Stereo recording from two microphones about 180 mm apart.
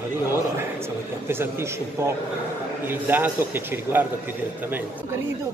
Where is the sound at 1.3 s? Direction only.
15° right (ahead or behind).